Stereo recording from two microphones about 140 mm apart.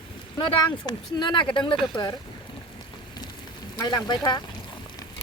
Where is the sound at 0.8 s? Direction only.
30° left (ahead or behind).